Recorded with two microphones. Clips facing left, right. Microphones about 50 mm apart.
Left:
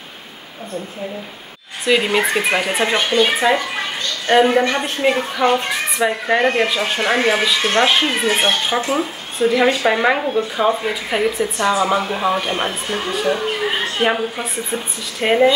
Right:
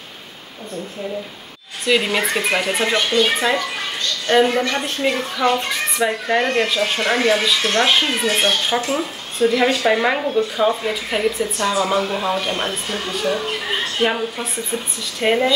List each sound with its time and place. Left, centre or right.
1.9 s speech: centre
15.1 s speech: centre